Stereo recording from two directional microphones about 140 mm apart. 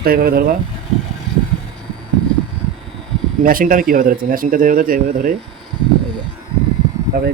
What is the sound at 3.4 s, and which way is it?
Speech, 90° right.